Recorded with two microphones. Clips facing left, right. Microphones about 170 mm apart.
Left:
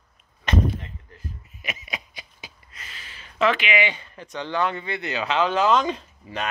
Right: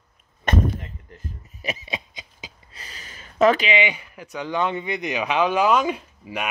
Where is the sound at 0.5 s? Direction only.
50° right (ahead or behind).